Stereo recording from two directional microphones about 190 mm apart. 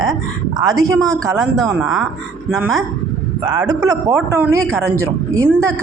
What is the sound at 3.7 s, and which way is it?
Speech, 15° right (ahead or behind).